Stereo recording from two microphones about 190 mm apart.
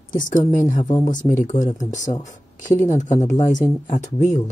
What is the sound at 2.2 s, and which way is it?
Speech, 40° left (ahead or behind).